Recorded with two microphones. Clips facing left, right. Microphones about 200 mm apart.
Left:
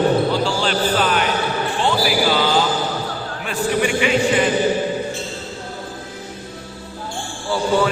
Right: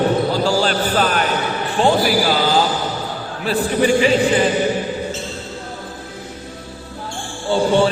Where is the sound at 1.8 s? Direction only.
40° right (ahead or behind).